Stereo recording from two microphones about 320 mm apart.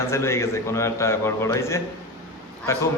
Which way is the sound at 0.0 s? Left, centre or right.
Centre.